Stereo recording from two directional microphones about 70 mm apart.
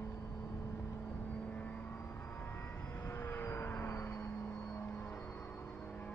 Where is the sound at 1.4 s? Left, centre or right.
Left.